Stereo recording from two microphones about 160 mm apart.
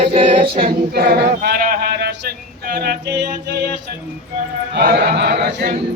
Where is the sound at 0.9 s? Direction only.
75° right (ahead or behind).